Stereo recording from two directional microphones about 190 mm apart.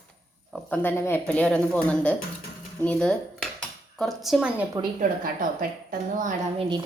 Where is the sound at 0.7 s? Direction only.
10° left (ahead or behind); by 4.6 s 5° right (ahead or behind).